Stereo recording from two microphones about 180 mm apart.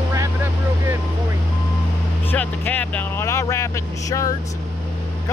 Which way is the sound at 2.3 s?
10° left (ahead or behind).